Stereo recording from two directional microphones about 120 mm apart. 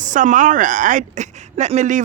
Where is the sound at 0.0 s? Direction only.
90° right.